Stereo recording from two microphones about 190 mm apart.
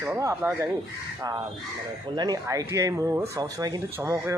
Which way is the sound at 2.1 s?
20° right (ahead or behind).